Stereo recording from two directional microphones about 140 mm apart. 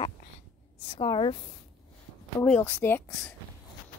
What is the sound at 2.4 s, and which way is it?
Speech, 10° left (ahead or behind).